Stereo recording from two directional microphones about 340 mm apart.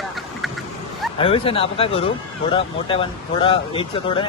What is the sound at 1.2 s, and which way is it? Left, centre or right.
Speech, centre.